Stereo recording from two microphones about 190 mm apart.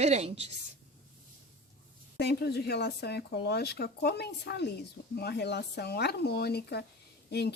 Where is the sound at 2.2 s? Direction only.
60° left (ahead or behind).